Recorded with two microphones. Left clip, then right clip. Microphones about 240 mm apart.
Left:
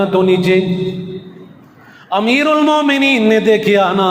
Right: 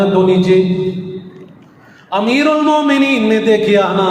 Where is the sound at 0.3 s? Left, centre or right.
Left.